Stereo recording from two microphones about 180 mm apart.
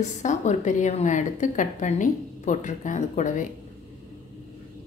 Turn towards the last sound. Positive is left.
turn(degrees=45)  # may be behind; listen again after turning